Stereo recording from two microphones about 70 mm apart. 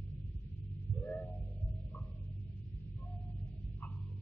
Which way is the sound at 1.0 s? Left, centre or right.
Centre.